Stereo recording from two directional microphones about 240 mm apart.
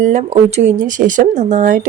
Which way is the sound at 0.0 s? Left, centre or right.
Right.